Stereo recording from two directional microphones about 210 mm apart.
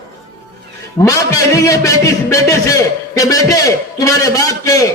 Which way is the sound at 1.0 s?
15° left (ahead or behind).